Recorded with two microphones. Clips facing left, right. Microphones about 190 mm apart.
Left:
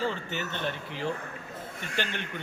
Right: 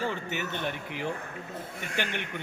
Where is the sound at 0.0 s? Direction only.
15° right (ahead or behind).